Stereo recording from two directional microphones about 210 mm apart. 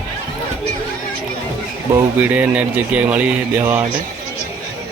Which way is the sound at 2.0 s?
10° right (ahead or behind).